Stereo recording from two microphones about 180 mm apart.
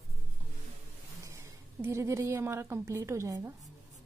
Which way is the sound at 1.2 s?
15° right (ahead or behind).